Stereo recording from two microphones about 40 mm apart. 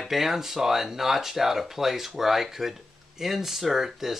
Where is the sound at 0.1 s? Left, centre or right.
Centre.